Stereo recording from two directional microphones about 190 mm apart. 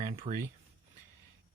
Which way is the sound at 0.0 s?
35° right (ahead or behind).